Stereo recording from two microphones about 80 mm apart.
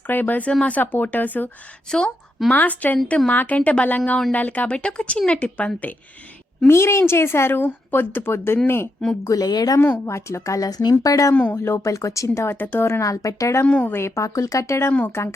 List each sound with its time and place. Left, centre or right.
0.1 s a woman's voice: left
1.9 s a woman's voice: centre
6.7 s a woman's voice: left
9.2 s speech: left
9.8 s a woman's voice: left
13.7 s speech: centre
13.9 s a woman's voice: left
14.9 s a woman's voice: left